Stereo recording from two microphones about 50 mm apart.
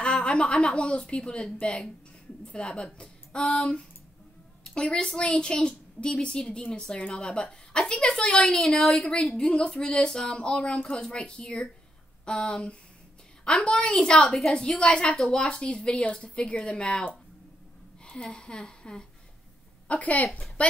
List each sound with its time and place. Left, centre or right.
0.0 s a woman's voice: centre
8.5 s speech: centre
8.9 s a woman's voice: left
18.0 s a woman's voice: centre
19.9 s a woman's voice: left